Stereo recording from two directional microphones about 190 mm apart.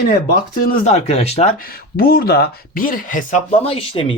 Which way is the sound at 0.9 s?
35° left (ahead or behind).